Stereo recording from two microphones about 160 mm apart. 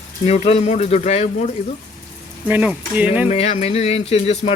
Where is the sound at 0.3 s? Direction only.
40° left (ahead or behind).